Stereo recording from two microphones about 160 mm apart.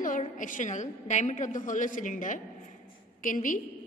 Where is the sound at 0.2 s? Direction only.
55° left (ahead or behind).